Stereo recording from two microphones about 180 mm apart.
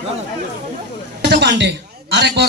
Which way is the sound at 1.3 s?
75° right (ahead or behind).